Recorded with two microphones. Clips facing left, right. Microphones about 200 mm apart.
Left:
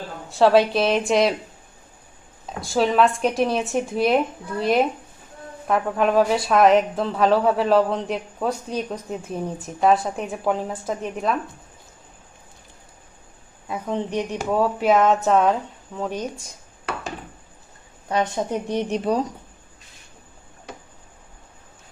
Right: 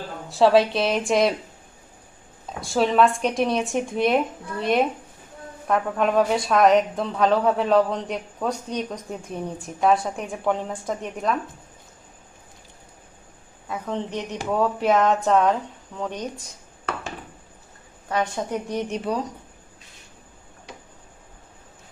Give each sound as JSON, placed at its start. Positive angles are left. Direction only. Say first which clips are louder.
{"t": 0.3, "sound": "speech", "louder": "left 1 dB", "side_deg": 0}
{"t": 2.6, "sound": "speech", "louder": "even", "side_deg": 0}
{"t": 13.7, "sound": "a woman's voice", "louder": "left 2 dB", "side_deg": 10}
{"t": 18.4, "sound": "a woman's voice", "louder": "left 3 dB", "side_deg": 25}
{"t": 18.7, "sound": "speech", "louder": "left 6 dB", "side_deg": 35}